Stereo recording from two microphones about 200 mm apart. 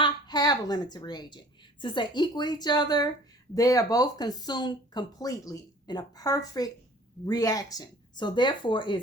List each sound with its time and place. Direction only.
0.0 s a woman's voice: 20° left (ahead or behind)